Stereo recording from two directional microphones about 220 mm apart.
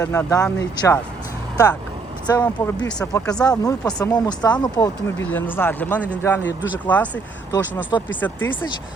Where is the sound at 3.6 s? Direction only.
15° left (ahead or behind).